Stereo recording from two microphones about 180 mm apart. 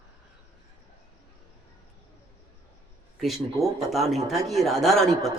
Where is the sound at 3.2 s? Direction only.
Centre (ahead or behind).